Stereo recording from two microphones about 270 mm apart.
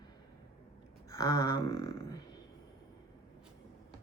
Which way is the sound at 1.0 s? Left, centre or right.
Centre.